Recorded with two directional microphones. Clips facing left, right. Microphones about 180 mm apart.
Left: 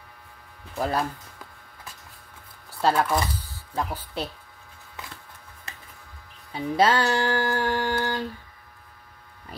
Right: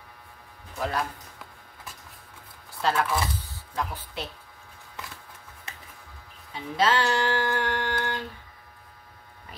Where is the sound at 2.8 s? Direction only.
40° left (ahead or behind).